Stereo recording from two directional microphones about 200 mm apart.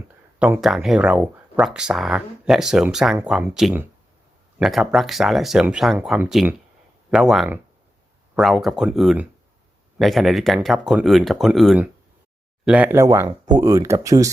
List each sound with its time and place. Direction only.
0.3 s speech: 10° right (ahead or behind)